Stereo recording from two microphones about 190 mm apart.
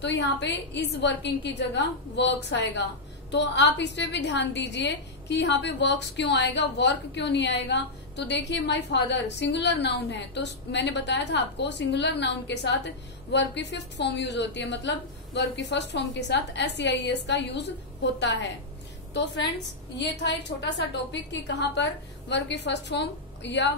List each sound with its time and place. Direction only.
0.0 s a woman's voice: 65° left (ahead or behind)
20.0 s a woman's voice: 65° left (ahead or behind)